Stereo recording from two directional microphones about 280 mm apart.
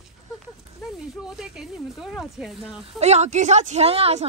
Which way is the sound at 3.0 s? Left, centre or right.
Right.